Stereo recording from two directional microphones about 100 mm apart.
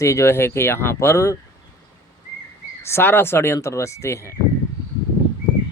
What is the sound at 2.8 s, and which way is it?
Speech, 20° left (ahead or behind).